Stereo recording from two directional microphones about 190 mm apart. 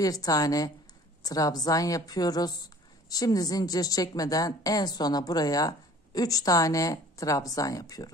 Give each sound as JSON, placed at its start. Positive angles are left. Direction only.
{"t": 0.0, "sound": "a woman's voice", "side_deg": 20}